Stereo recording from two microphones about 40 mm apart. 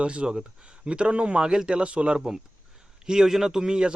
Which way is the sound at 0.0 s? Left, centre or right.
Right.